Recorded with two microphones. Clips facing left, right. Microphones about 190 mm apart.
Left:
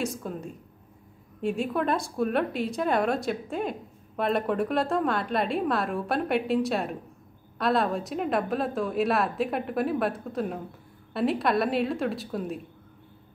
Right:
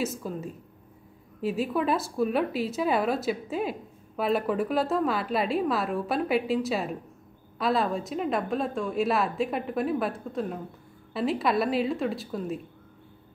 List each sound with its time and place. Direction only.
0.0 s a woman's voice: 5° right (ahead or behind)